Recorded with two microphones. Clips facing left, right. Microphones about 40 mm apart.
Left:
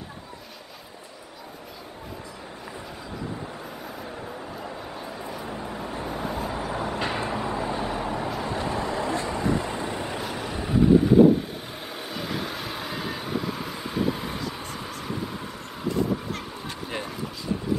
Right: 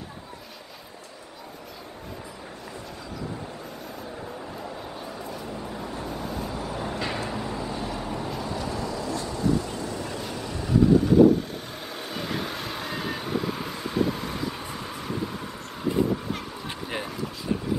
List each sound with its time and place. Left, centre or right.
5.4 s vehicle: centre
12.1 s vehicle: centre
17.5 s a sound: centre